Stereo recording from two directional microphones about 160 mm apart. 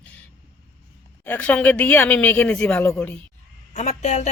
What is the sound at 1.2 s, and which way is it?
Speech, 10° left (ahead or behind).